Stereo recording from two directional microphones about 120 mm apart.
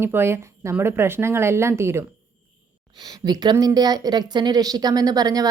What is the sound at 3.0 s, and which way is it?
Speech, 35° right (ahead or behind).